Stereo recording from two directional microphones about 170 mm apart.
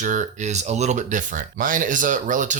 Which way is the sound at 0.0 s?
45° right (ahead or behind).